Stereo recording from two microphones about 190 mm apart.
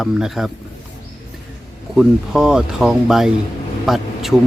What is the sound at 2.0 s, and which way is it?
Speech, 5° right (ahead or behind).